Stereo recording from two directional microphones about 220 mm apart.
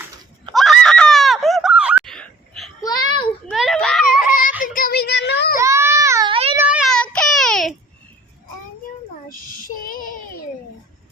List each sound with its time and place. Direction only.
0.5 s screaming: centre (ahead or behind)
2.8 s a sound: 20° left (ahead or behind)
3.5 s children playing: centre (ahead or behind)
4.2 s a sound: 40° left (ahead or behind)
5.5 s baby cry: 10° right (ahead or behind)
6.6 s child singing: 5° right (ahead or behind)
9.6 s child singing: 40° left (ahead or behind)